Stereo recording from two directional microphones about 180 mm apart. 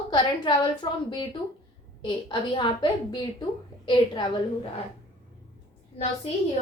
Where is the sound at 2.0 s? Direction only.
25° left (ahead or behind).